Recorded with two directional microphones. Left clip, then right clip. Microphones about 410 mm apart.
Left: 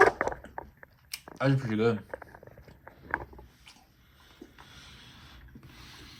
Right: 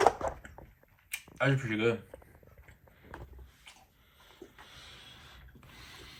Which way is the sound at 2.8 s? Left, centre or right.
Left.